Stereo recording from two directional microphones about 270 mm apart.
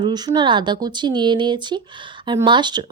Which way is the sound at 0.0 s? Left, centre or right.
Centre.